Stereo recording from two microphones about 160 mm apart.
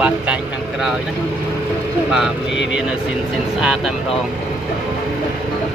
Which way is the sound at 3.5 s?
5° right (ahead or behind).